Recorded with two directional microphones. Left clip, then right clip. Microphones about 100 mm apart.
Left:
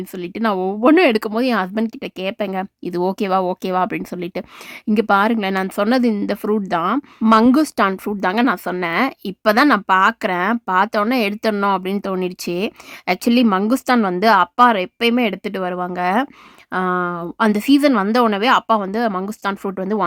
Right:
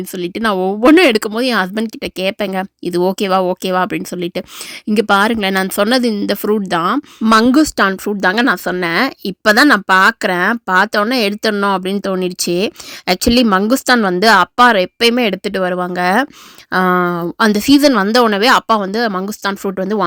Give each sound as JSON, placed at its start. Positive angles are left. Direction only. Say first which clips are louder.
{"t": 0.0, "sound": "speech", "louder": "right 4 dB", "side_deg": -20}
{"t": 16.7, "sound": "speech", "louder": "right 6 dB", "side_deg": -45}
{"t": 17.4, "sound": "speech", "louder": "right 4 dB", "side_deg": -25}